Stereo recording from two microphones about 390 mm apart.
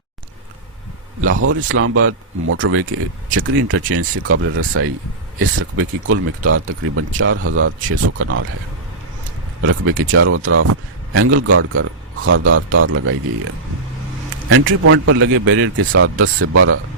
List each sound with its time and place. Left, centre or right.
1.3 s speech: right
9.6 s speech: right
14.5 s speech: right